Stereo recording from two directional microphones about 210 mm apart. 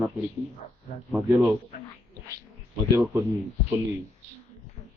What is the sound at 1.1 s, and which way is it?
Speech, 5° right (ahead or behind).